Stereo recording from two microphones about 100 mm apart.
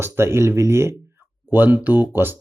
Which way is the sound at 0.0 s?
25° right (ahead or behind).